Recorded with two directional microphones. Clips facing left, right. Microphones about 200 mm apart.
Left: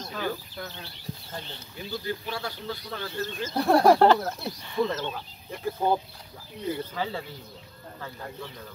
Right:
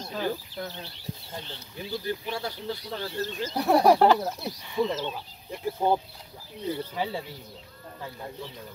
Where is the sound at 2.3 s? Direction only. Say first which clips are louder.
Right 1 dB; 25° right (ahead or behind).